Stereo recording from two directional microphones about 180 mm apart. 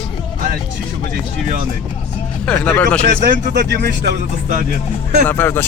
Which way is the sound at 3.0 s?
55° right (ahead or behind).